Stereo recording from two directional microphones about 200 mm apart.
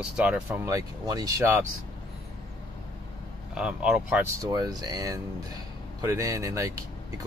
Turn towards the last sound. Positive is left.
turn(degrees=-15)  # may be behind; listen again after turning